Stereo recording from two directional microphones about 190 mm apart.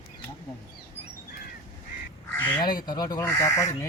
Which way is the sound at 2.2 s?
10° left (ahead or behind).